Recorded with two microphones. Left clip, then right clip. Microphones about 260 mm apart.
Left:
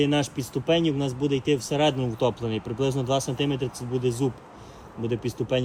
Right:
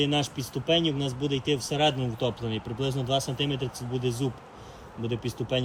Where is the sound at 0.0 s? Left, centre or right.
Centre.